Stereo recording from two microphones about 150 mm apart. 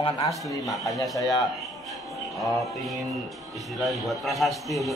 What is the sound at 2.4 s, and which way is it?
A man's voice, centre (ahead or behind).